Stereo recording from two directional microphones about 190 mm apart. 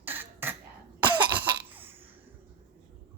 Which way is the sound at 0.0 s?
10° right (ahead or behind).